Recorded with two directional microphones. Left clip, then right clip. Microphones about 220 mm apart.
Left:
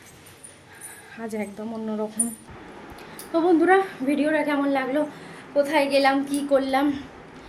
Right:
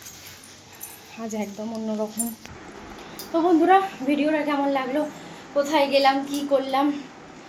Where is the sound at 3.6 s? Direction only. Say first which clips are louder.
Right 1 dB; 15° left (ahead or behind).